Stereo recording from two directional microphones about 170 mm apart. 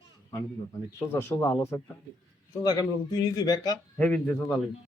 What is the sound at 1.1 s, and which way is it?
Speech, 15° left (ahead or behind).